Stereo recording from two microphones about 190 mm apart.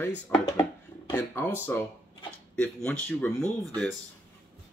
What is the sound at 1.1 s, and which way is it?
Speech, 10° left (ahead or behind).